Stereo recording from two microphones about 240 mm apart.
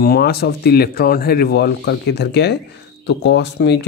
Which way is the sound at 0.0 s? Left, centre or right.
Left.